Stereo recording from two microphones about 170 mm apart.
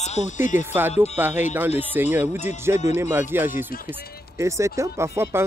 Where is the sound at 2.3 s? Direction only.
45° left (ahead or behind).